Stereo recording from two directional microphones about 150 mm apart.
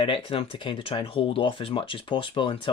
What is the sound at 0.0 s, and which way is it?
Speech, 35° left (ahead or behind).